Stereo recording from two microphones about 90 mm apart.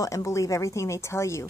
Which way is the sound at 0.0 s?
35° left (ahead or behind).